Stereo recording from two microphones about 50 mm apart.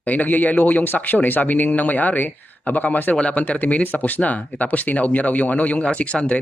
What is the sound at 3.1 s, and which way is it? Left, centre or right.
Speech, left.